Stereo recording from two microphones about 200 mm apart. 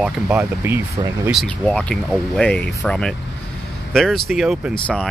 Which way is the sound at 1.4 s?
5° left (ahead or behind).